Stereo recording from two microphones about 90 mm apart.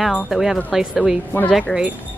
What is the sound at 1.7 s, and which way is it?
Speech, 10° left (ahead or behind).